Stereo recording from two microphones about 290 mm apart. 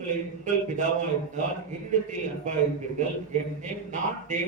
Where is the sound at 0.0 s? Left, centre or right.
Right.